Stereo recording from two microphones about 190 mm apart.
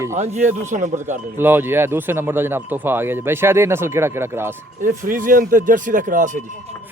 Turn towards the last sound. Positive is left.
turn(degrees=-45)  # may be behind; listen again after turning